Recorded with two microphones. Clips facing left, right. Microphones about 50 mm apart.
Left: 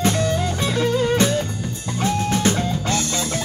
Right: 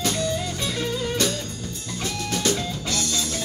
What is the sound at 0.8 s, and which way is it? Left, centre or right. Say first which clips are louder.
Music: left 9 dB; left.